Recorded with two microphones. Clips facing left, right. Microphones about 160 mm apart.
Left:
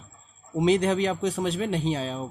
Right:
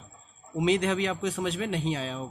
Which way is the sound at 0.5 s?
35° left (ahead or behind).